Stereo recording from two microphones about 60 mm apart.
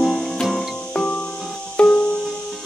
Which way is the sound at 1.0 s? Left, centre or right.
Left.